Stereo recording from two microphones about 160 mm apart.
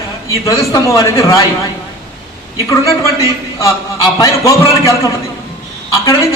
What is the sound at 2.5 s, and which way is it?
A man's voice, 20° left (ahead or behind).